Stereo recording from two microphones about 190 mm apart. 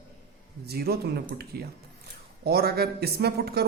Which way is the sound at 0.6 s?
55° right (ahead or behind).